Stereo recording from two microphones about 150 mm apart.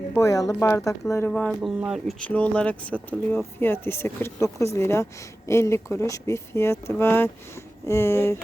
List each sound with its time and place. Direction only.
0.2 s speech: 20° left (ahead or behind)
1.3 s speech: centre (ahead or behind)